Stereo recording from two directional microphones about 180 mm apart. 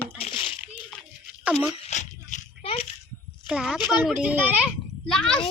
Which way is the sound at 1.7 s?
35° left (ahead or behind).